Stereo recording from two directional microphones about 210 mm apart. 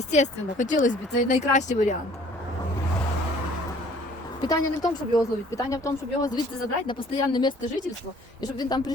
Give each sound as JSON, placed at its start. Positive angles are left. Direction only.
{"t": 0.1, "sound": "speech", "side_deg": 35}
{"t": 4.4, "sound": "a woman's voice", "side_deg": 20}